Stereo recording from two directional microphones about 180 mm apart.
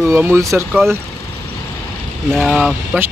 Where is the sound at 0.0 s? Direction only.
15° right (ahead or behind).